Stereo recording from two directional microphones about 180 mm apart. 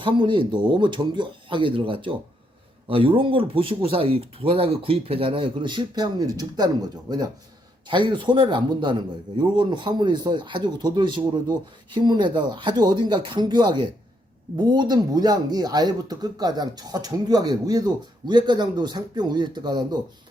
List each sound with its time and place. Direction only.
0.0 s a man's voice: 25° right (ahead or behind)